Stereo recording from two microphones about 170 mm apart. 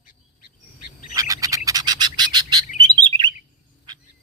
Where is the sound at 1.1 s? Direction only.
20° right (ahead or behind).